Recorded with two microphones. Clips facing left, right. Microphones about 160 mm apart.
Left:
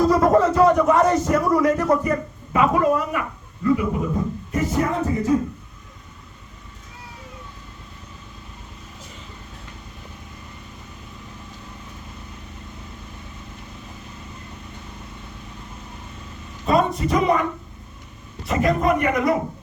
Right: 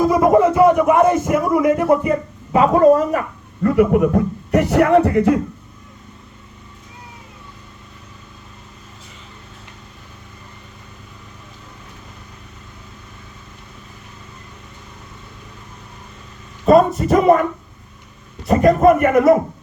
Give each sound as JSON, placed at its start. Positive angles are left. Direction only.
{"t": 0.0, "sound": "a man's voice", "side_deg": -10}
{"t": 2.5, "sound": "speech", "side_deg": -35}
{"t": 3.6, "sound": "a man's voice", "side_deg": -65}
{"t": 17.0, "sound": "a man's voice", "side_deg": -50}
{"t": 18.4, "sound": "a man's voice", "side_deg": -45}